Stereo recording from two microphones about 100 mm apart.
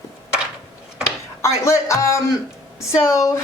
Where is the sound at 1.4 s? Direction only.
30° left (ahead or behind).